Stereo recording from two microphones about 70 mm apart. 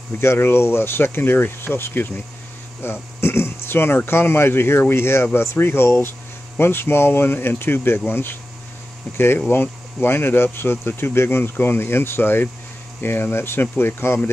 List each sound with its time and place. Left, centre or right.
0.2 s speech: left